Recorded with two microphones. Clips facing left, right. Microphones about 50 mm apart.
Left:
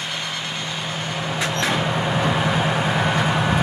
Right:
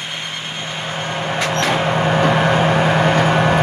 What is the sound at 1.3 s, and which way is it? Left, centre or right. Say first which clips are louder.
Vehicle: right 4 dB; right.